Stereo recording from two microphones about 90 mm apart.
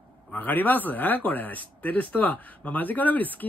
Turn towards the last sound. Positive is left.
turn(degrees=20)  # may be behind; listen again after turning